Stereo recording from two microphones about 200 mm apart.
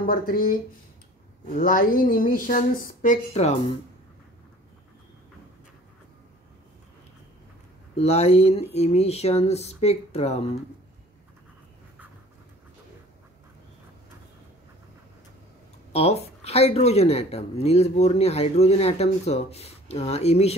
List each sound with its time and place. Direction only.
0.0 s speech: 45° left (ahead or behind)
7.9 s speech: 30° left (ahead or behind)
15.9 s speech: 30° left (ahead or behind)